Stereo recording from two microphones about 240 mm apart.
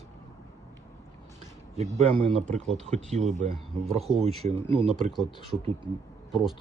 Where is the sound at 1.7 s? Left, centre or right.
Right.